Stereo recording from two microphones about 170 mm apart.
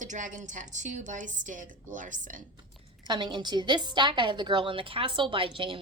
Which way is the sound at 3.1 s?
25° right (ahead or behind).